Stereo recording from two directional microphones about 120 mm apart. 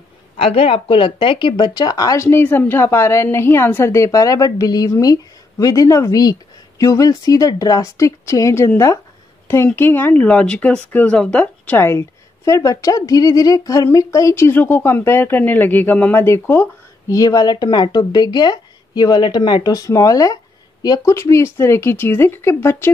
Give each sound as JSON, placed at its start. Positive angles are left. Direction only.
{"t": 0.4, "sound": "speech", "side_deg": 50}
{"t": 17.1, "sound": "speech", "side_deg": 30}